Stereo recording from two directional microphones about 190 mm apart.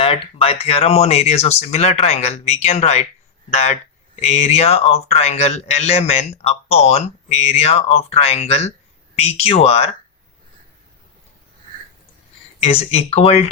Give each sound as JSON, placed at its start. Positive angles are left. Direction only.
{"t": 0.0, "sound": "speech", "side_deg": 30}
{"t": 12.5, "sound": "speech", "side_deg": 35}